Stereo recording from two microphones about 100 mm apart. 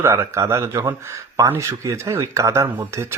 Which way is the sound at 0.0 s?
25° right (ahead or behind).